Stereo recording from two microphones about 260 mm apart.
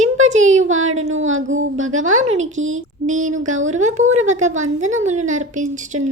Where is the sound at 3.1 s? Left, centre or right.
Right.